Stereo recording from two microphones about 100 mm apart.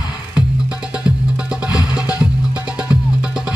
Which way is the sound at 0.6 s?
10° right (ahead or behind).